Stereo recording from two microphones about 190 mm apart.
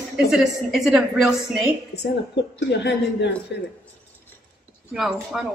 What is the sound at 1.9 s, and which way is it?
A woman's voice, 60° left (ahead or behind).